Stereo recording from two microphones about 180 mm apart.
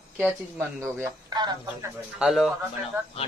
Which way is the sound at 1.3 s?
25° right (ahead or behind).